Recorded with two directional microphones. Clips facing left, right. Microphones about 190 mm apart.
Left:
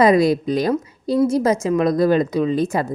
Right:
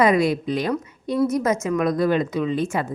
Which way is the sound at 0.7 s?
25° left (ahead or behind).